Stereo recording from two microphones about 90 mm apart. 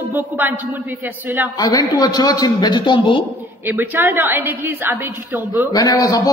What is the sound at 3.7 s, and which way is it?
A woman's voice, 25° right (ahead or behind).